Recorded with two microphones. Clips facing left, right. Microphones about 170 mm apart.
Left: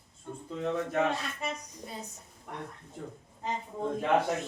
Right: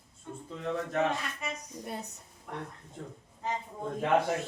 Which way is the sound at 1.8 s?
60° right (ahead or behind).